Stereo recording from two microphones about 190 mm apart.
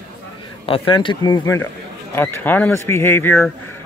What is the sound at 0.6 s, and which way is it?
A man's voice, 30° left (ahead or behind).